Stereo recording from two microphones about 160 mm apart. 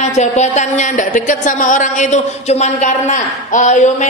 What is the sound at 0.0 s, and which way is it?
A woman's voice, 45° left (ahead or behind).